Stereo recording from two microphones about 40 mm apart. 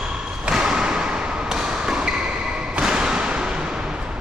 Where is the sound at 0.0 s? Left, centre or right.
Right.